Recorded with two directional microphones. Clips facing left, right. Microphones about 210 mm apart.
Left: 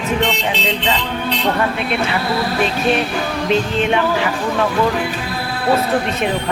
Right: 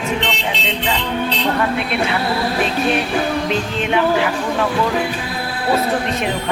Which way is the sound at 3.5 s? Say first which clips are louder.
Left 3 dB; centre (ahead or behind).